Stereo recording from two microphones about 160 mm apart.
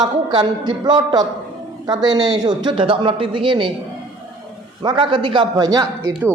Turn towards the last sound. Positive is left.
turn(degrees=-25)  # may be behind; listen again after turning